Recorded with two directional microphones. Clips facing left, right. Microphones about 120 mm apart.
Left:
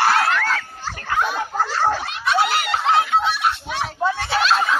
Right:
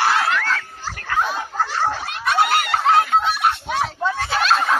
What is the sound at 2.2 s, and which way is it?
Snicker, 50° right (ahead or behind).